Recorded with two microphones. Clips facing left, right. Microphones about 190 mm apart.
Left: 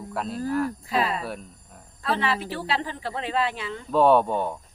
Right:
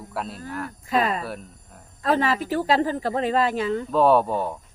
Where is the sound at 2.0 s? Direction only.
45° right (ahead or behind).